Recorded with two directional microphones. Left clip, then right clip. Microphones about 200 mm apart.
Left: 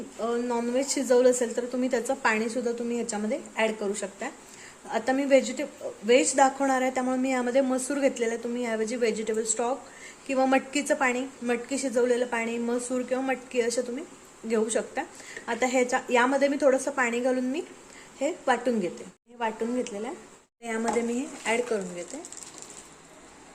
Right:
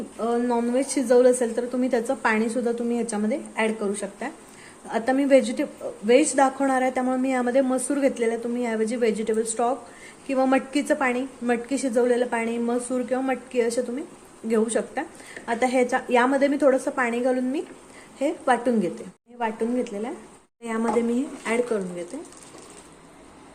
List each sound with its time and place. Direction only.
0.2 s a woman's voice: 5° right (ahead or behind)